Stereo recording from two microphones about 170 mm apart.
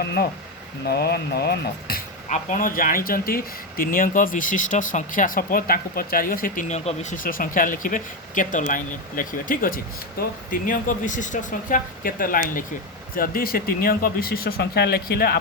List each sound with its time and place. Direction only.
0.0 s speech: 75° left (ahead or behind)
2.3 s speech: 50° left (ahead or behind)